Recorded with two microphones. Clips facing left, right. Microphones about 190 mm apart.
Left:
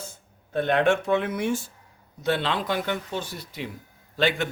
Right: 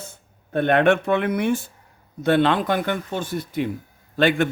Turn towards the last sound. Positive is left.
turn(degrees=-55)  # may be behind; listen again after turning